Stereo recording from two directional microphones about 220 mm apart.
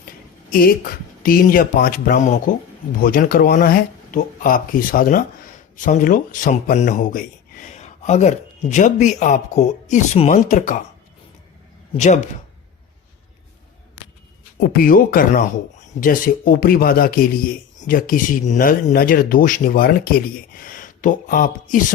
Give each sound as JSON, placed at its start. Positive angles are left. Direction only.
{"t": 1.2, "sound": "speech", "side_deg": 40}
{"t": 11.9, "sound": "speech", "side_deg": 30}
{"t": 14.6, "sound": "speech", "side_deg": 40}